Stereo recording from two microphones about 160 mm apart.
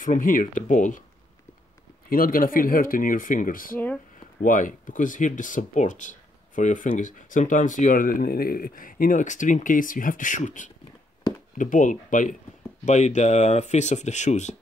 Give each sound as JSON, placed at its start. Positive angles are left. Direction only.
{"t": 0.0, "sound": "speech", "side_deg": 60}
{"t": 2.0, "sound": "speech", "side_deg": 65}